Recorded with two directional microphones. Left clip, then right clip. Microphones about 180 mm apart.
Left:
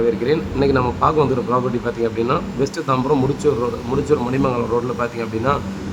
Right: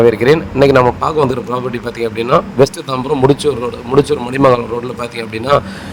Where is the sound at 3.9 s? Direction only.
35° right (ahead or behind).